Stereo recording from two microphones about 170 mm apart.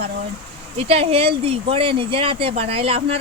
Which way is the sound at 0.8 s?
35° right (ahead or behind).